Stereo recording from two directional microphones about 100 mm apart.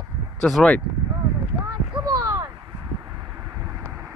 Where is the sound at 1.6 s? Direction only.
40° right (ahead or behind).